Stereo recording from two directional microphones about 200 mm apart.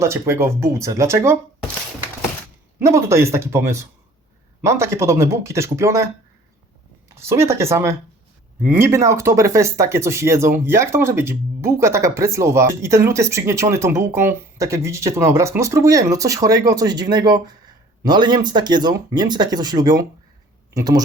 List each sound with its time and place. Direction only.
0.0 s speech: 15° right (ahead or behind)
2.7 s speech: 15° right (ahead or behind)
7.2 s speech: 15° right (ahead or behind)